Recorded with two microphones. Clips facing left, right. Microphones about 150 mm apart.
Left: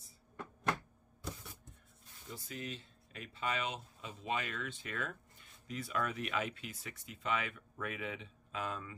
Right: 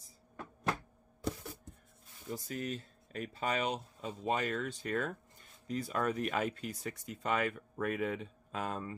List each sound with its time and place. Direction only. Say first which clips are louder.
2.3 s speech: right 6 dB; 45° right (ahead or behind)